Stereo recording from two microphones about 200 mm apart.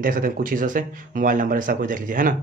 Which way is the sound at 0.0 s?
45° right (ahead or behind).